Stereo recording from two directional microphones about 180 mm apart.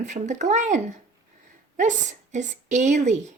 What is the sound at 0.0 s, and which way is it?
Speech, 40° right (ahead or behind).